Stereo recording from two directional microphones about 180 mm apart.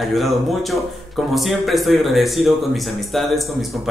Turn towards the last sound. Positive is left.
turn(degrees=0)  # may be behind; listen again after turning